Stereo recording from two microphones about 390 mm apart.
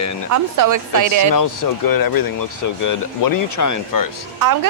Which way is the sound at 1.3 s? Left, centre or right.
Left.